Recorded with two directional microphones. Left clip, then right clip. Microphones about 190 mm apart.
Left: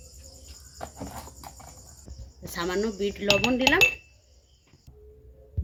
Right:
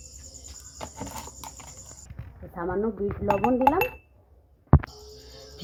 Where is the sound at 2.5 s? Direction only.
15° left (ahead or behind).